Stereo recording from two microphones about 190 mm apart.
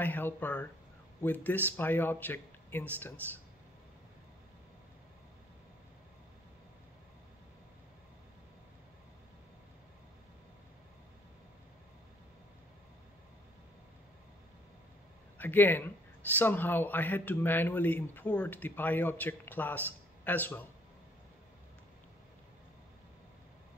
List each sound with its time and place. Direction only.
0.0 s a man's voice: 10° left (ahead or behind)
15.3 s a man's voice: 10° left (ahead or behind)